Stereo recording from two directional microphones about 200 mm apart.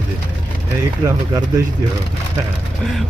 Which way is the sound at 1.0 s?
20° right (ahead or behind).